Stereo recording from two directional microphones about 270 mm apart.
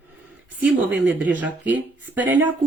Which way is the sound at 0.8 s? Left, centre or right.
Right.